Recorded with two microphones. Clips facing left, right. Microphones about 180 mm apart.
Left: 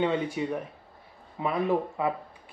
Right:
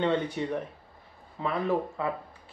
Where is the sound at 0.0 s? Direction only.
10° left (ahead or behind).